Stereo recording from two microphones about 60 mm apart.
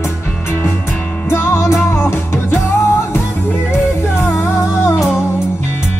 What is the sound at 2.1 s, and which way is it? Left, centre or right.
Music, left.